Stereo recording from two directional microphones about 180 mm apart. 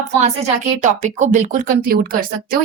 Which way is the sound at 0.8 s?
40° right (ahead or behind).